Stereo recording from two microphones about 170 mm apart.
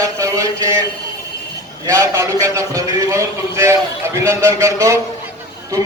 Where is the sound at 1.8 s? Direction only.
15° right (ahead or behind).